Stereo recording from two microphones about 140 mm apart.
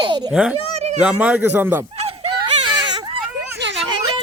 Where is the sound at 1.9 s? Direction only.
45° right (ahead or behind).